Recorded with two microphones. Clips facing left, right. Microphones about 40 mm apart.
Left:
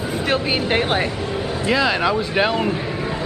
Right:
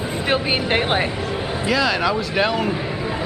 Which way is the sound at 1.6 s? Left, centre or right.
Centre.